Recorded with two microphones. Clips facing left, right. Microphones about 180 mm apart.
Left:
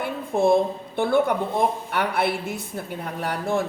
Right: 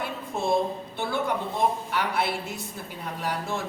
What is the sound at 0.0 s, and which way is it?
A woman's voice, 55° left (ahead or behind).